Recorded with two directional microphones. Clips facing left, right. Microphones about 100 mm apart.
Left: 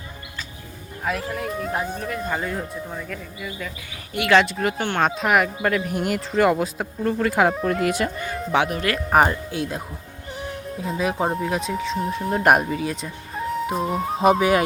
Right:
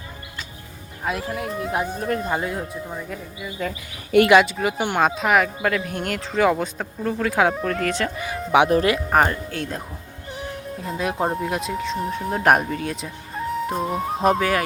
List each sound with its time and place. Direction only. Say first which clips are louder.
1.0 s speech: even; 5° right (ahead or behind)
2.0 s speech: right 4 dB; 35° right (ahead or behind)
2.4 s speech: right 1 dB; 5° right (ahead or behind)
4.1 s speech: right 11 dB; 85° right
4.4 s speech: right 1 dB; centre (ahead or behind)
8.1 s speech: even; 5° right (ahead or behind)
9.0 s speech: left 1 dB; 5° left (ahead or behind)